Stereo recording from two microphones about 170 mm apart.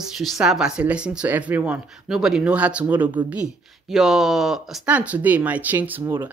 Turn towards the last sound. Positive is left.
turn(degrees=-15)  # may be behind; listen again after turning